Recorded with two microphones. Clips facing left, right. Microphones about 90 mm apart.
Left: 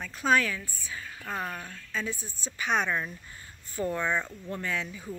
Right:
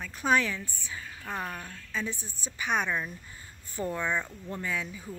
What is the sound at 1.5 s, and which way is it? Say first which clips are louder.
Speech: left 1 dB; centre (ahead or behind).